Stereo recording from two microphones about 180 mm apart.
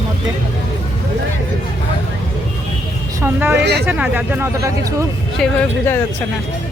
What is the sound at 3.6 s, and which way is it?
Speech, 65° right (ahead or behind).